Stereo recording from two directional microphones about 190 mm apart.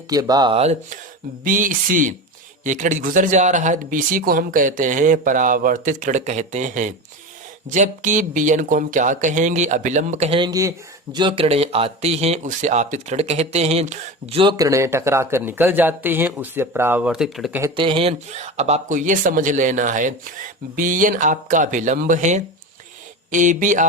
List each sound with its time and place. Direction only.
0.1 s speech: 20° right (ahead or behind); by 0.9 s 35° right (ahead or behind)
1.5 s speech: 45° right (ahead or behind); by 17.6 s centre (ahead or behind)
17.6 s speech: 25° right (ahead or behind); by 23.8 s 40° right (ahead or behind)